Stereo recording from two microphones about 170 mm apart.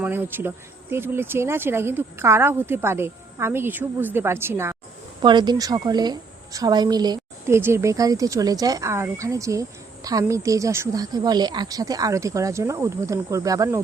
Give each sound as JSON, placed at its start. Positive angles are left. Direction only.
{"t": 0.0, "sound": "speech", "side_deg": -10}
{"t": 5.2, "sound": "a woman's voice", "side_deg": -25}